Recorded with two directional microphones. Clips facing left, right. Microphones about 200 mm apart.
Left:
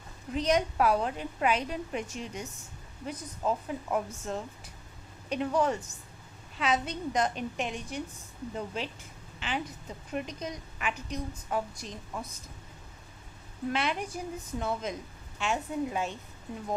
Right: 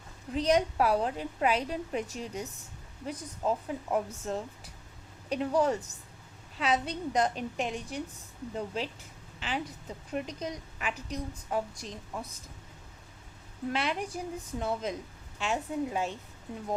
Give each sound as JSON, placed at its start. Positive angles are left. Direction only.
{"t": 0.3, "sound": "a woman's voice", "side_deg": -30}
{"t": 13.7, "sound": "a woman's voice", "side_deg": -35}